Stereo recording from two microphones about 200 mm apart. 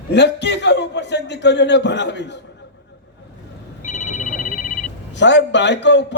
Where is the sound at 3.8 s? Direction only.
35° left (ahead or behind).